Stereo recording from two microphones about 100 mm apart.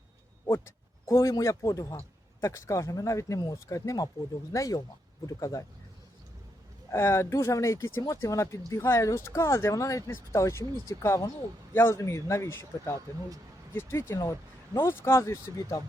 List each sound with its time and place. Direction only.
1.0 s speech: 30° left (ahead or behind)
6.9 s speech: 25° left (ahead or behind)